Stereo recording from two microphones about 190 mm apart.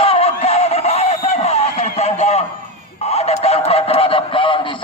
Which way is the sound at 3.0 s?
35° left (ahead or behind).